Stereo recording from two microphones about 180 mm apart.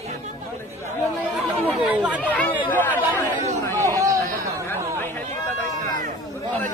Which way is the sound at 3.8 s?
15° right (ahead or behind).